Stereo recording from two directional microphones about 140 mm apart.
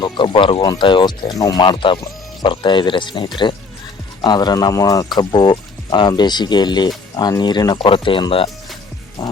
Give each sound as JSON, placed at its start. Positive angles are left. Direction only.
{"t": 0.0, "sound": "speech", "side_deg": 35}